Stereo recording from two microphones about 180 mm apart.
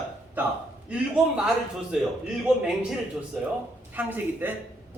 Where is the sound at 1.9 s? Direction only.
5° right (ahead or behind).